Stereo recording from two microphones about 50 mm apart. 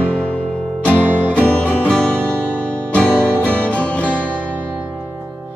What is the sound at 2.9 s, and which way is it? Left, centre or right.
Music, left.